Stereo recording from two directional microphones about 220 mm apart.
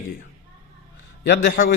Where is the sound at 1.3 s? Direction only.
45° left (ahead or behind).